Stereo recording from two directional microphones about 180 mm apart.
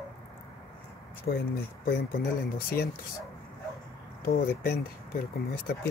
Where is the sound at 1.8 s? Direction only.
60° left (ahead or behind).